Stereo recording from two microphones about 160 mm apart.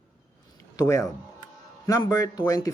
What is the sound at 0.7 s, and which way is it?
Speech, 20° left (ahead or behind).